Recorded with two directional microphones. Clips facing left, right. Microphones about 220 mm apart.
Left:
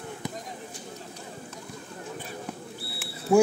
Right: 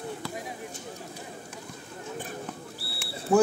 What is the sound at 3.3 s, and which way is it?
Speech, 10° left (ahead or behind).